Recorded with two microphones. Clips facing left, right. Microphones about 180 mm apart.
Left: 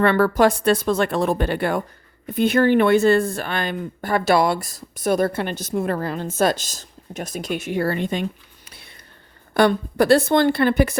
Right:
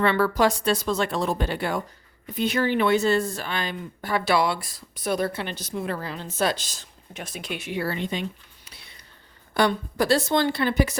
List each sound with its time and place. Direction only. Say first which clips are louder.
0.0 s speech: left 5 dB; 50° left (ahead or behind)